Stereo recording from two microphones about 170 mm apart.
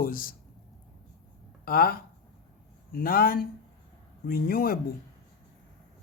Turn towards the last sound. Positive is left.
turn(degrees=60)  # may be behind; listen again after turning